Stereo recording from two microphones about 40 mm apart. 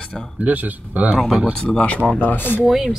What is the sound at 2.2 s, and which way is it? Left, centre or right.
Speech, left.